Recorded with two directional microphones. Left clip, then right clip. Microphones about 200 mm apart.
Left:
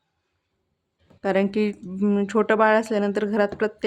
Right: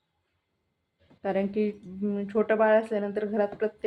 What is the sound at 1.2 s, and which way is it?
Speech, 45° left (ahead or behind).